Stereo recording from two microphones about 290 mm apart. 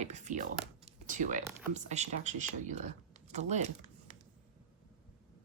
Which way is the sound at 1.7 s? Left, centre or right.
Right.